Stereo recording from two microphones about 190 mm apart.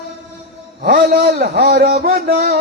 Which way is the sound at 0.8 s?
50° right (ahead or behind).